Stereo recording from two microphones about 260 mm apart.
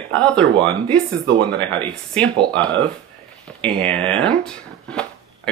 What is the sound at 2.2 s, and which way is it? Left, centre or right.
Speech, centre.